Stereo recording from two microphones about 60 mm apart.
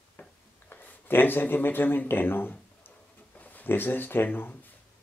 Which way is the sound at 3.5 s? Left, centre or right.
Left.